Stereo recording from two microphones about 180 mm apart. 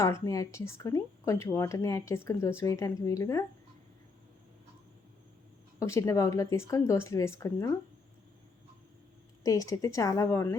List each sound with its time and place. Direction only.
0.0 s speech: 15° left (ahead or behind)
5.8 s speech: 15° left (ahead or behind)
9.4 s a woman's voice: 20° left (ahead or behind)